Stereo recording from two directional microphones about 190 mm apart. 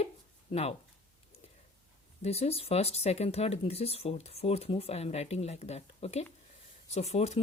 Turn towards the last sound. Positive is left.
turn(degrees=35)  # may be behind; listen again after turning